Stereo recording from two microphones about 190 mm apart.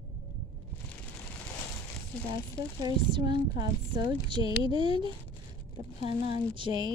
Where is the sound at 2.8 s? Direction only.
20° right (ahead or behind).